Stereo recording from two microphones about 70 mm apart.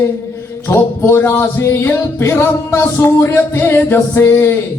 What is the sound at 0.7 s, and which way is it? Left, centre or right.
Music, left.